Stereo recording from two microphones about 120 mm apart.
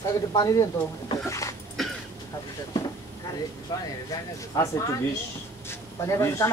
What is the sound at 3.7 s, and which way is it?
Speech, 35° left (ahead or behind).